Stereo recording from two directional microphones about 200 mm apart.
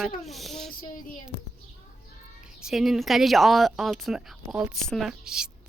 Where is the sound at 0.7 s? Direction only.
45° left (ahead or behind).